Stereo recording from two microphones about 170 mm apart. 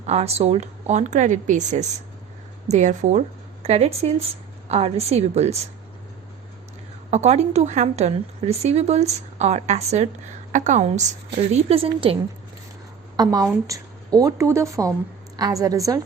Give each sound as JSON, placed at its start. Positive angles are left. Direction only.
{"t": 0.0, "sound": "speech", "side_deg": -40}
{"t": 7.1, "sound": "a woman's voice", "side_deg": -40}
{"t": 13.1, "sound": "a woman's voice", "side_deg": -20}